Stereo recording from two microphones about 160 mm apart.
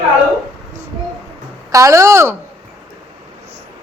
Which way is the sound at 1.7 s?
20° right (ahead or behind).